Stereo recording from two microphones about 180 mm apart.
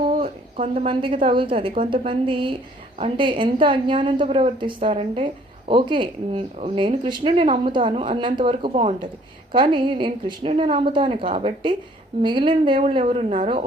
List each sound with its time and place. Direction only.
0.2 s a woman's voice: 35° right (ahead or behind)